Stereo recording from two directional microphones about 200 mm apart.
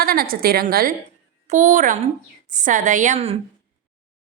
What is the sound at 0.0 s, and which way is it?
A woman's voice, 50° right (ahead or behind).